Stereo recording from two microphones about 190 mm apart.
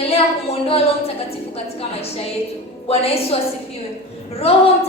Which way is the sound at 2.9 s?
30° left (ahead or behind).